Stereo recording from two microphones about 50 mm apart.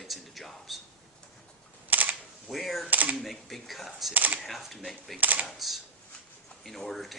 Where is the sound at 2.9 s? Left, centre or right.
Right.